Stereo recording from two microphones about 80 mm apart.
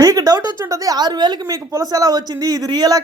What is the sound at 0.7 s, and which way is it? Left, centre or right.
A woman's voice, right.